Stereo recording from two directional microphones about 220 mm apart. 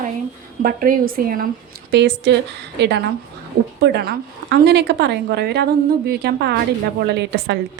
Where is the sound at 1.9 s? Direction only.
50° right (ahead or behind).